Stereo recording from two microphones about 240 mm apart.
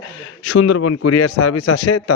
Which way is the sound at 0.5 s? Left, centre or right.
Left.